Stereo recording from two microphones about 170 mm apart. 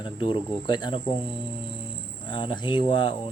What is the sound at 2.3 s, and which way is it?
Speech, 25° left (ahead or behind).